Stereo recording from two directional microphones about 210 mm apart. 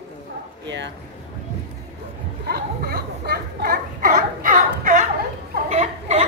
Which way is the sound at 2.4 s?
50° right (ahead or behind).